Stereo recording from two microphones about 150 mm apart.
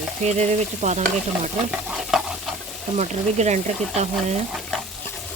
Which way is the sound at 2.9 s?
50° right (ahead or behind).